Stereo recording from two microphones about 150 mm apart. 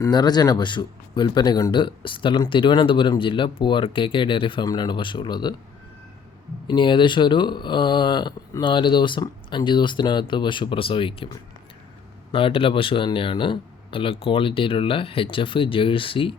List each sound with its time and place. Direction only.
0.0 s speech: 30° left (ahead or behind)
6.7 s speech: 30° left (ahead or behind)
12.3 s speech: 35° left (ahead or behind)